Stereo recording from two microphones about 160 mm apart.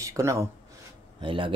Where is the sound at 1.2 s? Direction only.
30° right (ahead or behind).